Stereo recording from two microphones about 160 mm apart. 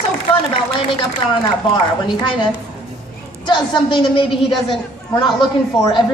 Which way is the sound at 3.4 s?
30° left (ahead or behind).